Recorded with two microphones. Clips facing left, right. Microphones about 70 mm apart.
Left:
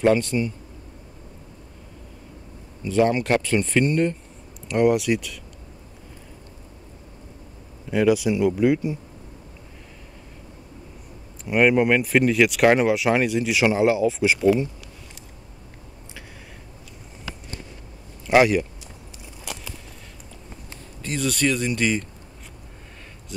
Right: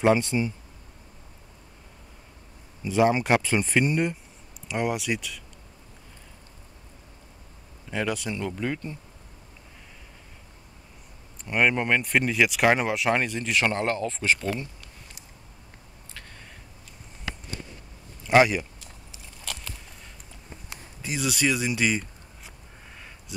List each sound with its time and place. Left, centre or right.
0.0 s speech: centre
2.8 s speech: centre
4.6 s speech: centre
7.9 s speech: centre
11.4 s speech: centre
18.2 s speech: centre
19.5 s a sound: centre
21.0 s speech: centre